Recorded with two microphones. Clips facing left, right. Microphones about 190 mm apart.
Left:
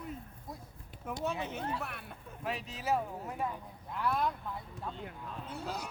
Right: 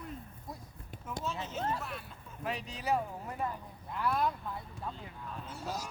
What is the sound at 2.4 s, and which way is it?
Speech, centre (ahead or behind).